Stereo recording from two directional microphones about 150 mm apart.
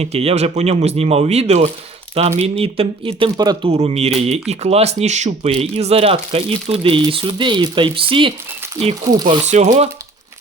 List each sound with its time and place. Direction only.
0.0 s speech: 45° right (ahead or behind); by 3.7 s 25° right (ahead or behind)
3.7 s speech: 40° right (ahead or behind)
9.2 s speech: 50° right (ahead or behind)